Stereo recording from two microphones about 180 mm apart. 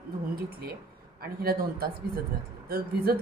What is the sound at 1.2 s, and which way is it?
A woman's voice, 55° right (ahead or behind).